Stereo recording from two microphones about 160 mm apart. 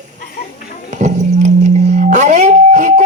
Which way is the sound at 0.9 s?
45° right (ahead or behind).